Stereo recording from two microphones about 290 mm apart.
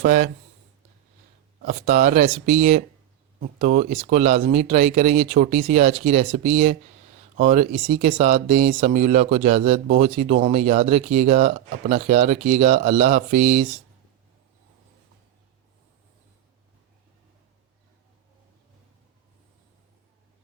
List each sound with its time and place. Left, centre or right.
0.0 s a man's voice: right
1.6 s a man's voice: right